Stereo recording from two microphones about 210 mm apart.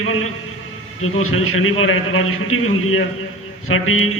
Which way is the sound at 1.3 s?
75° left (ahead or behind).